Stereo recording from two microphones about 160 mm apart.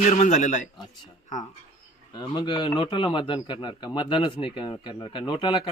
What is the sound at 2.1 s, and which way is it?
A man's voice, 30° left (ahead or behind).